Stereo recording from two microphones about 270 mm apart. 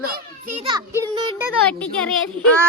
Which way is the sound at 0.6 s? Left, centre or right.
Centre.